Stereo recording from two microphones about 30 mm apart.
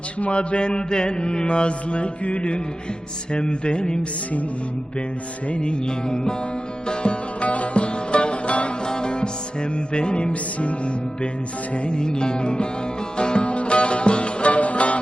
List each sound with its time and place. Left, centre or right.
0.2 s mantra: left
3.3 s mantra: left
5.5 s mantra: left
6.8 s music: left
7.4 s music: left
8.9 s music: left
9.9 s mantra: left
11.7 s mantra: left
13.1 s music: left